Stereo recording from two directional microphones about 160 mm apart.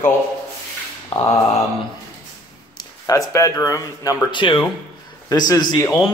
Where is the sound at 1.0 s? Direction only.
20° left (ahead or behind).